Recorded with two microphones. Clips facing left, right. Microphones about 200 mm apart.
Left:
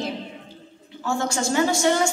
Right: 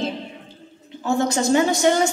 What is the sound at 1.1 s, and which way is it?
A woman's voice, 20° right (ahead or behind).